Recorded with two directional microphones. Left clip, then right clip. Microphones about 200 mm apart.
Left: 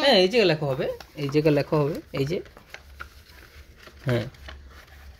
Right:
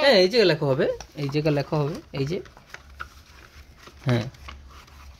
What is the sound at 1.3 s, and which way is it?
Speech, 5° right (ahead or behind).